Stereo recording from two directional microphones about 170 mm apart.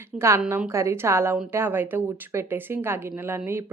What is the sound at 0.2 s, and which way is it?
A woman's voice, 15° right (ahead or behind).